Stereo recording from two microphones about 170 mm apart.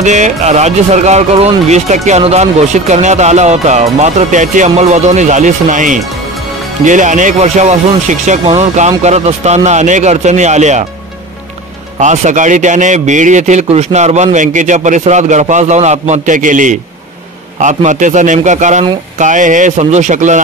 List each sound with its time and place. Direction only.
0.0 s a man's voice: 45° right (ahead or behind)
12.0 s a man's voice: 45° right (ahead or behind)